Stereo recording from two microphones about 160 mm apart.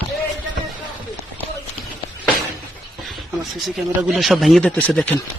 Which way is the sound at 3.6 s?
Centre (ahead or behind).